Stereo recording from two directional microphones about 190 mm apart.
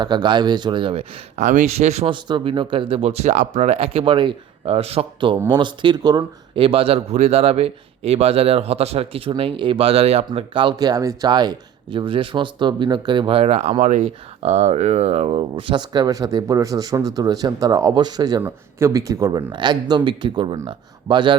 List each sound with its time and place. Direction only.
0.0 s speech: 25° right (ahead or behind)
1.4 s speech: 40° right (ahead or behind); by 21.3 s 25° right (ahead or behind)